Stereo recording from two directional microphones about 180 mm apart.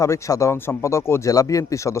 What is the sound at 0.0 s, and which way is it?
Speech, 15° left (ahead or behind).